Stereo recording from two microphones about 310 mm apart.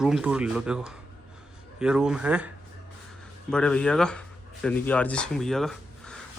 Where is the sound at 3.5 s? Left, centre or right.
Centre.